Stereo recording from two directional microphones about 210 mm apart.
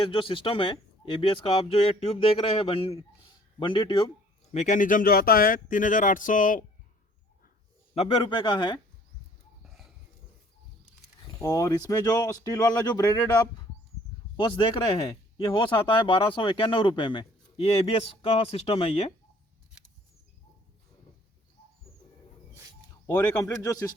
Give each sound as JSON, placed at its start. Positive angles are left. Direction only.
{"t": 0.0, "sound": "speech", "side_deg": 25}
{"t": 4.5, "sound": "speech", "side_deg": 35}
{"t": 7.9, "sound": "speech", "side_deg": 25}
{"t": 9.6, "sound": "a sound", "side_deg": 0}
{"t": 11.3, "sound": "speech", "side_deg": 15}
{"t": 23.0, "sound": "speech", "side_deg": 15}